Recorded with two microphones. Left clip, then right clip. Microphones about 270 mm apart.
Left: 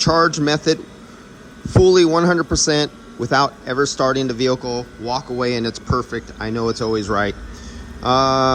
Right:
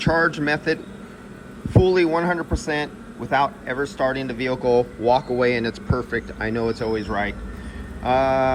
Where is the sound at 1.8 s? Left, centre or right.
Left.